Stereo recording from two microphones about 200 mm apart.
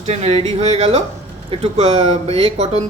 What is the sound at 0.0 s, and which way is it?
Speech, 35° right (ahead or behind).